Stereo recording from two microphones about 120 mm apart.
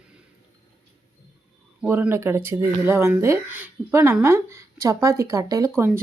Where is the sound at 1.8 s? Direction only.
15° right (ahead or behind).